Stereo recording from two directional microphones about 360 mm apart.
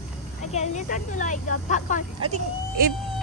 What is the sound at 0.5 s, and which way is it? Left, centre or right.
Speech, centre.